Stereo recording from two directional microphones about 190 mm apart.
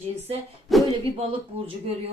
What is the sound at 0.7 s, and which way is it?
Speech, centre (ahead or behind).